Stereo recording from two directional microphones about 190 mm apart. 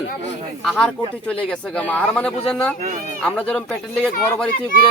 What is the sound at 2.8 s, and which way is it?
Speech, 45° right (ahead or behind).